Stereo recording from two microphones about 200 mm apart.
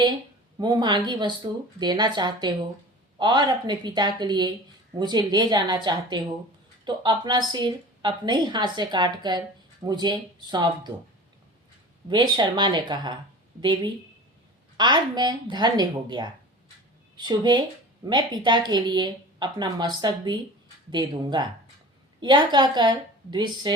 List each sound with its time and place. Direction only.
0.6 s a woman's voice: 20° right (ahead or behind)
12.0 s a woman's voice: 20° right (ahead or behind)